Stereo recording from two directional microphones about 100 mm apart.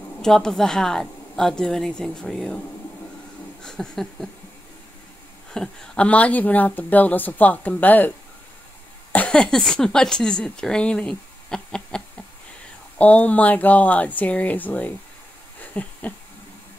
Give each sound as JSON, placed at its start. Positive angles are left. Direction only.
{"t": 0.2, "sound": "a woman's voice", "side_deg": 5}
{"t": 3.6, "sound": "a woman's voice", "side_deg": 5}
{"t": 5.5, "sound": "speech", "side_deg": 5}
{"t": 9.1, "sound": "speech", "side_deg": 10}
{"t": 15.6, "sound": "a sound", "side_deg": 15}